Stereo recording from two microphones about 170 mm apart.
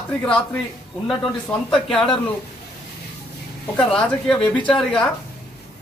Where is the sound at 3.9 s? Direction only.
5° left (ahead or behind).